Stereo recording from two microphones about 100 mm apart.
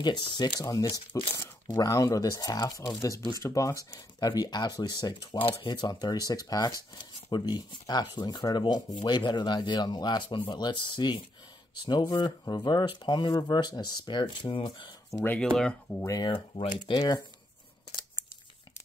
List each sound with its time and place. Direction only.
0.0 s speech: 45° left (ahead or behind)
1.3 s speech: 25° left (ahead or behind); by 5.4 s 45° left (ahead or behind)
5.4 s speech: 60° left (ahead or behind)
15.2 s speech: 10° left (ahead or behind)
16.3 s speech: 50° left (ahead or behind)